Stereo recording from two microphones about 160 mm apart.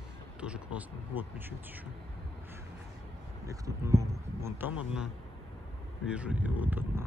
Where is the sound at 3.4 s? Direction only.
20° right (ahead or behind).